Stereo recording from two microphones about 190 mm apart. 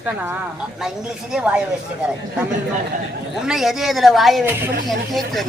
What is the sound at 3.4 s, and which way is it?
A man's voice, centre (ahead or behind).